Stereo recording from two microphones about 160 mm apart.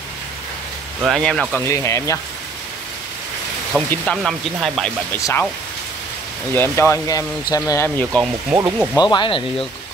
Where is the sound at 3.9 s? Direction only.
5° left (ahead or behind).